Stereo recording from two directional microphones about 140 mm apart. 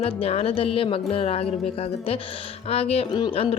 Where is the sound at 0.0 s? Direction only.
45° left (ahead or behind).